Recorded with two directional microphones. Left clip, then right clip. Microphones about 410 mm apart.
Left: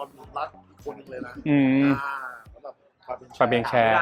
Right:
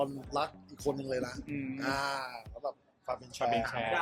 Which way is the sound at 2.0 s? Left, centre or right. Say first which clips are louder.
Left 4 dB; right.